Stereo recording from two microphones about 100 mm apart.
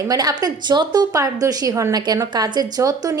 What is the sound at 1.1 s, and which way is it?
A woman's voice, 30° right (ahead or behind).